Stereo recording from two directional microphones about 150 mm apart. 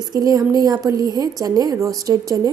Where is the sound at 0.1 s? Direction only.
25° right (ahead or behind).